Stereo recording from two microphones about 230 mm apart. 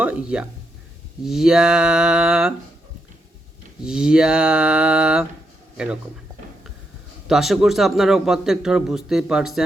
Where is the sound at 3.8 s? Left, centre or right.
Centre.